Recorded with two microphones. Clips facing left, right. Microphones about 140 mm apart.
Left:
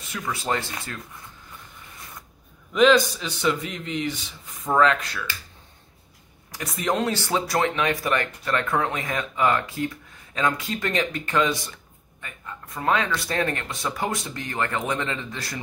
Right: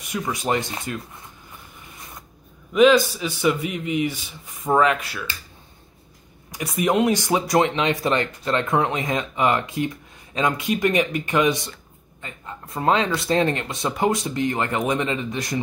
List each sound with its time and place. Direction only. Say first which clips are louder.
0.0 s a man's voice: right 4 dB; 15° right (ahead or behind)
2.7 s a man's voice: right 2 dB; 5° right (ahead or behind)
6.5 s a man's voice: right 5 dB; 10° right (ahead or behind)